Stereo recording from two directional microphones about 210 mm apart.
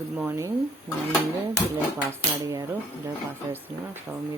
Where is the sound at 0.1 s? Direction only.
10° right (ahead or behind).